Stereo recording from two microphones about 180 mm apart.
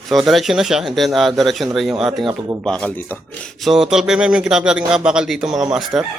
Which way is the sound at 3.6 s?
Centre (ahead or behind).